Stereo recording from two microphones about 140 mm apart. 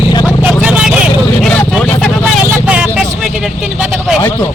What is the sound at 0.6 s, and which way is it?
Vehicle, 5° right (ahead or behind).